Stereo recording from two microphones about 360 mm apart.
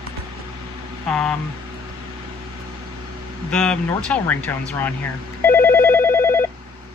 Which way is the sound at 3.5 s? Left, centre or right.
Centre.